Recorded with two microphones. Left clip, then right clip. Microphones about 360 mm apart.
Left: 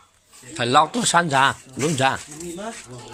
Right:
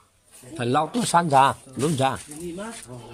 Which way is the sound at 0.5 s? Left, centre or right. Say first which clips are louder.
Left 6 dB; centre.